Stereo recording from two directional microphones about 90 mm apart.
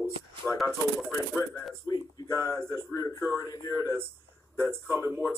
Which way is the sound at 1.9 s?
40° left (ahead or behind).